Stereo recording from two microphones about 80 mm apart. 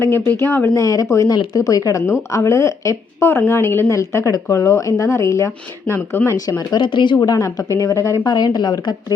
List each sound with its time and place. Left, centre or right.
0.0 s speech: left
0.7 s a woman's voice: left
3.9 s a woman's voice: left
6.8 s speech: left
7.2 s speech: left
8.2 s speech: left